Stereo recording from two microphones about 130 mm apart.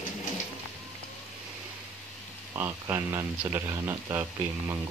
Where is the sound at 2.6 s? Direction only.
20° right (ahead or behind).